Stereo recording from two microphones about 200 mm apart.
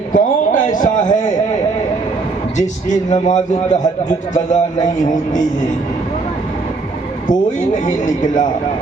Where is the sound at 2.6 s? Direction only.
35° left (ahead or behind).